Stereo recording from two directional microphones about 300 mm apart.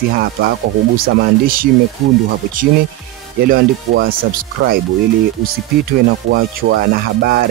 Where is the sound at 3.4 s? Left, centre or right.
Right.